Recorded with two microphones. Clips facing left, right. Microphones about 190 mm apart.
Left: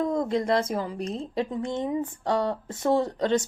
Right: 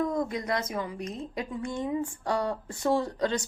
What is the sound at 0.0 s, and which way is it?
A woman's voice, 25° left (ahead or behind).